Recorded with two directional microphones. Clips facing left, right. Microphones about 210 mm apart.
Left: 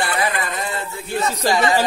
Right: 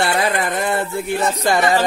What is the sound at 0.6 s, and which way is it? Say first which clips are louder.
Speech: right 7 dB; 65° right (ahead or behind).